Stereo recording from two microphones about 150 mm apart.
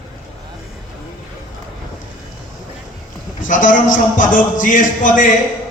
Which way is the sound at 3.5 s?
60° left (ahead or behind).